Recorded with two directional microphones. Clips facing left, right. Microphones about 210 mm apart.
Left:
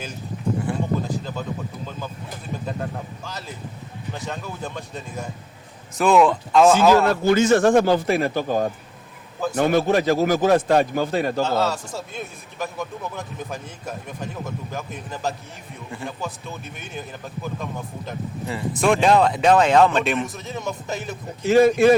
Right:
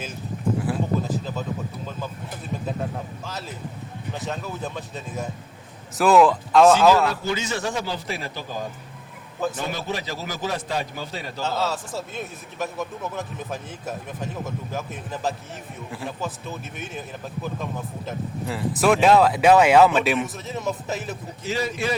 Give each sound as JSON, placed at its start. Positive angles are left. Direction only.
{"t": 0.6, "sound": "a sound", "side_deg": -5}
{"t": 3.2, "sound": "speech", "side_deg": 0}
{"t": 7.1, "sound": "a man's voice", "side_deg": 50}
{"t": 11.4, "sound": "speech", "side_deg": 0}
{"t": 21.4, "sound": "a man's voice", "side_deg": 50}